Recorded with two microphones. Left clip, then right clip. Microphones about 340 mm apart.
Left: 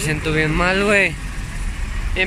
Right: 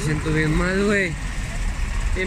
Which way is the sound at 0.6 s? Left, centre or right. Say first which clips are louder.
Left 7 dB; centre.